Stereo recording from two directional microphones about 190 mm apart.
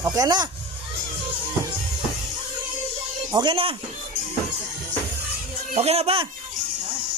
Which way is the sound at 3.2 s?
20° right (ahead or behind).